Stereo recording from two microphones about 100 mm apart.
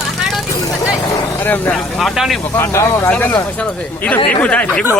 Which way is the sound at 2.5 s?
25° left (ahead or behind).